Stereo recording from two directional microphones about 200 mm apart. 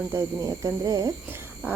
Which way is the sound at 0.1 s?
15° right (ahead or behind).